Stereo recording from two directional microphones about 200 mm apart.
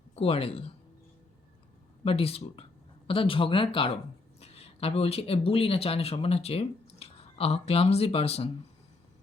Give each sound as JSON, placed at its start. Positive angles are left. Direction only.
{"t": 0.2, "sound": "speech", "side_deg": 30}
{"t": 2.0, "sound": "speech", "side_deg": 30}